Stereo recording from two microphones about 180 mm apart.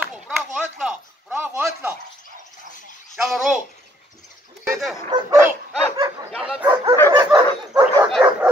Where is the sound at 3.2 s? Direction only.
Centre (ahead or behind).